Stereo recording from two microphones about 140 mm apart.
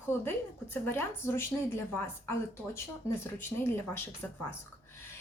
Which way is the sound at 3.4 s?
15° left (ahead or behind).